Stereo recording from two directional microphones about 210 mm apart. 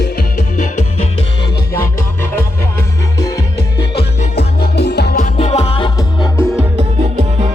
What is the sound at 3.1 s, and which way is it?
Music, 15° left (ahead or behind).